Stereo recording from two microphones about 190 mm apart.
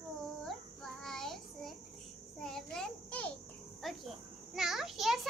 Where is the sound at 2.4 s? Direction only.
5° left (ahead or behind).